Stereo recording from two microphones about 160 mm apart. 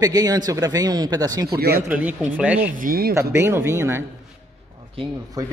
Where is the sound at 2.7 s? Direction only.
60° right (ahead or behind).